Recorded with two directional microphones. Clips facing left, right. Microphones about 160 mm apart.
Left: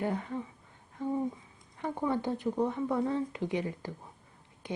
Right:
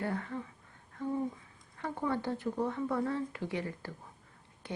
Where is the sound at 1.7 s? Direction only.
15° left (ahead or behind).